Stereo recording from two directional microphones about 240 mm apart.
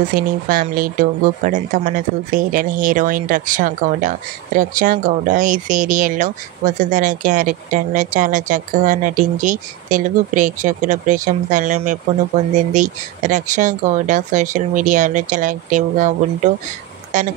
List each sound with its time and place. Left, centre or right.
0.1 s speech: right